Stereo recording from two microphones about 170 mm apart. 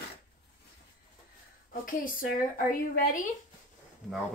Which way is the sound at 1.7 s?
55° left (ahead or behind).